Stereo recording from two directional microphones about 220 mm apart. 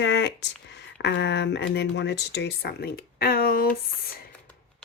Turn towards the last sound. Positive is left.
turn(degrees=40)  # may be behind; listen again after turning